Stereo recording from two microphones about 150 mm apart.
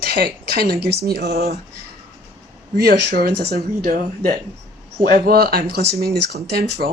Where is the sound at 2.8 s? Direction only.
90° right.